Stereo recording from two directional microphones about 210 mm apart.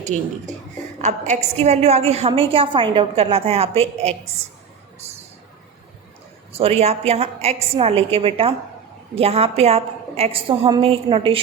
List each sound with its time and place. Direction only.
0.0 s a woman's voice: 35° right (ahead or behind)
6.5 s a woman's voice: 30° right (ahead or behind)